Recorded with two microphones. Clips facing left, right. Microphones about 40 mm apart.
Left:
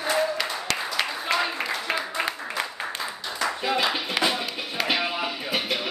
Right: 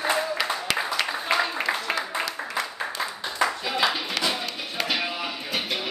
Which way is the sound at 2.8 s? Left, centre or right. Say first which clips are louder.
Right 1 dB; centre.